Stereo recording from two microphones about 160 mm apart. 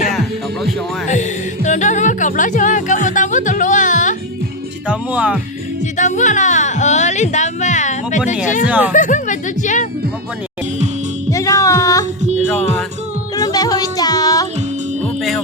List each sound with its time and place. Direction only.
1.0 s music: 50° left (ahead or behind)
4.9 s music: 5° right (ahead or behind)
6.0 s a sound: 50° left (ahead or behind)
8.6 s speech: 10° right (ahead or behind)
8.9 s speech: 50° left (ahead or behind)
11.3 s music: 20° left (ahead or behind)
12.2 s music: 45° right (ahead or behind)
12.5 s music: 10° left (ahead or behind)
13.3 s music: 25° left (ahead or behind)
15.0 s music: centre (ahead or behind)